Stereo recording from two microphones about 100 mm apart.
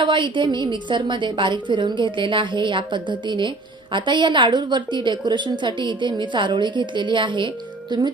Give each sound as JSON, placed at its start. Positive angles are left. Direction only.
{"t": 0.0, "sound": "a woman's voice", "side_deg": -55}